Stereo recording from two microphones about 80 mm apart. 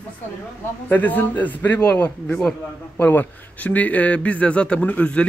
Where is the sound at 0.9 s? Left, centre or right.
Left.